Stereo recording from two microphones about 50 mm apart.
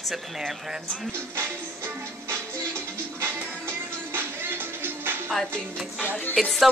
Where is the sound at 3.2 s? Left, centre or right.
Right.